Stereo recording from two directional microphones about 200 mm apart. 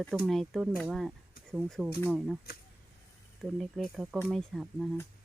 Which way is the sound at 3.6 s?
Centre (ahead or behind).